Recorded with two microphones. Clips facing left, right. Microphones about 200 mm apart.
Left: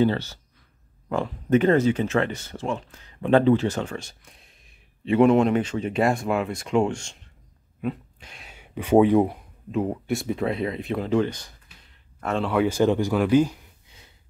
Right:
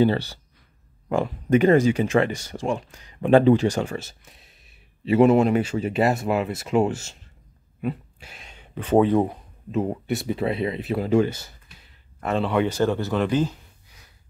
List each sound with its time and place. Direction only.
1.1 s speech: 10° right (ahead or behind)
7.8 s a sound: 5° right (ahead or behind)
8.5 s speech: 10° left (ahead or behind)
9.7 s speech: centre (ahead or behind)
13.8 s snort: 25° left (ahead or behind)